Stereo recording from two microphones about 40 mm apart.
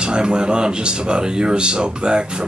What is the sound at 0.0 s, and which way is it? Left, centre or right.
Speech, right.